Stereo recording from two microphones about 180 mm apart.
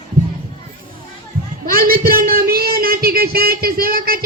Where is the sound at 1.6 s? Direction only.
55° right (ahead or behind).